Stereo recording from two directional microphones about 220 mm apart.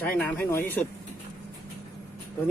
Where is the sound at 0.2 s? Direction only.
5° left (ahead or behind).